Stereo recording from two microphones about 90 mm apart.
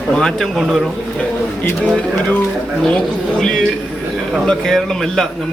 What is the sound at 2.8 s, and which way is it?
Speech, 10° left (ahead or behind).